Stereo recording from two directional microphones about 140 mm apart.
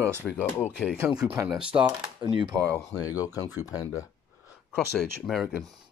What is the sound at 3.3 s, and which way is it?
Speech, 15° right (ahead or behind).